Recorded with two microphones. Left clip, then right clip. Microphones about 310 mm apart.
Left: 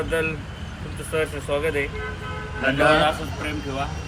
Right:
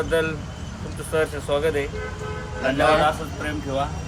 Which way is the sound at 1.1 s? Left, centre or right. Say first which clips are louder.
Right 2 dB; centre.